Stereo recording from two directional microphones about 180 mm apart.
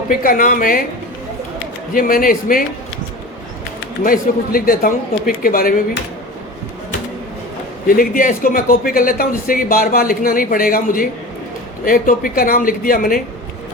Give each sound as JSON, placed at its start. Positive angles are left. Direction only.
{"t": 0.2, "sound": "speech", "side_deg": 50}
{"t": 1.9, "sound": "speech", "side_deg": 50}
{"t": 4.0, "sound": "speech", "side_deg": 50}
{"t": 7.9, "sound": "speech", "side_deg": 50}